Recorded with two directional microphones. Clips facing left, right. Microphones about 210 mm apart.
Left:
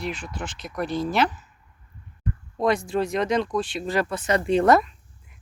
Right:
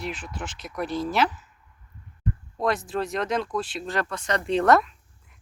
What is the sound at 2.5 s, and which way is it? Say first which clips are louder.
Speech: left 4 dB; centre (ahead or behind).